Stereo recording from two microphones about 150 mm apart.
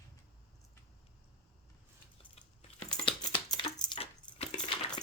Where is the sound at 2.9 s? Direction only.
35° left (ahead or behind).